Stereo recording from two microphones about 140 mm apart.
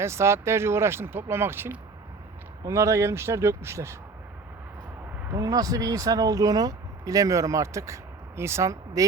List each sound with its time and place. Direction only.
0.0 s speech: 20° right (ahead or behind)
5.3 s speech: 25° right (ahead or behind)